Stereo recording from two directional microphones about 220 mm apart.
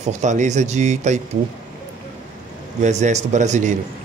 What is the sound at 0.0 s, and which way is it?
Speech, 35° right (ahead or behind).